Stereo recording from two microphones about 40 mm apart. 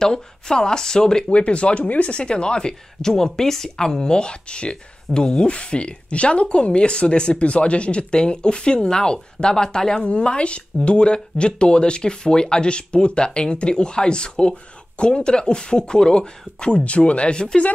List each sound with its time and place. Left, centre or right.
0.0 s speech: centre
1.4 s speech: left